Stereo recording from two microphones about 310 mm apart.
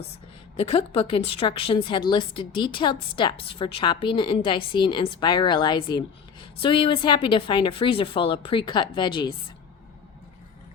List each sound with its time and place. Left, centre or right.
0.5 s a woman's voice: centre